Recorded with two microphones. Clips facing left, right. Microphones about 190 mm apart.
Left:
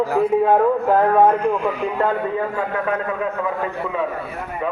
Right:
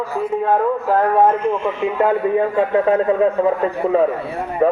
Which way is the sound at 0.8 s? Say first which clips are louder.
Right 2 dB; 5° right (ahead or behind).